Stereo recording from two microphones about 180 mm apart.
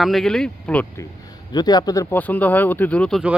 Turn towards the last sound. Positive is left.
turn(degrees=5)  # may be behind; listen again after turning